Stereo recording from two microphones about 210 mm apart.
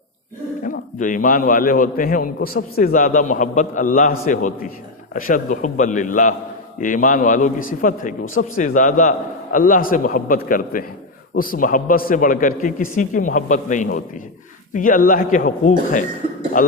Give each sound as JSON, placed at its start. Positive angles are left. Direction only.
{"t": 0.6, "sound": "a man's voice", "side_deg": 40}